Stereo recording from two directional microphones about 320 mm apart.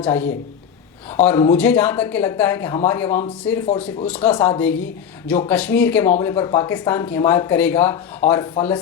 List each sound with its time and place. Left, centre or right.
0.0 s a man's voice: centre